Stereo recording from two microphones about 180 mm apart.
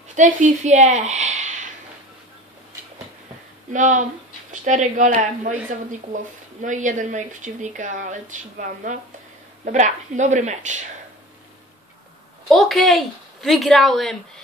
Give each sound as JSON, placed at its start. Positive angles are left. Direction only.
{"t": 0.1, "sound": "speech", "side_deg": -45}
{"t": 3.7, "sound": "speech", "side_deg": -45}
{"t": 12.4, "sound": "a woman's voice", "side_deg": 0}